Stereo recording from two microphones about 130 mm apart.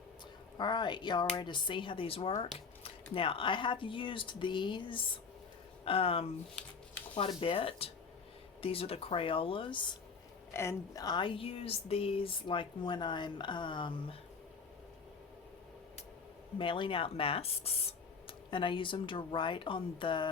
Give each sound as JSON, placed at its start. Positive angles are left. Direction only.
{"t": 0.5, "sound": "speech", "side_deg": 35}
{"t": 10.5, "sound": "speech", "side_deg": 20}
{"t": 16.6, "sound": "speech", "side_deg": 40}